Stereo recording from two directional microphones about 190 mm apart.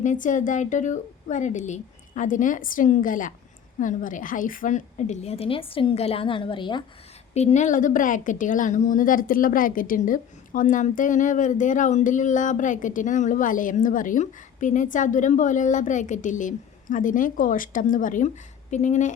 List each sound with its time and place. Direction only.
0.0 s a woman's voice: 40° left (ahead or behind); by 6.8 s 25° left (ahead or behind)
7.3 s a woman's voice: 35° left (ahead or behind)